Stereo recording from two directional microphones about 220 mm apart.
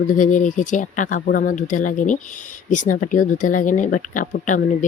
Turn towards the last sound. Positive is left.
turn(degrees=35)  # may be behind; listen again after turning